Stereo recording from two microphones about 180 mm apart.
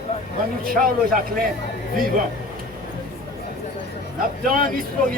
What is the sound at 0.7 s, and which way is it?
Speech, 55° right (ahead or behind).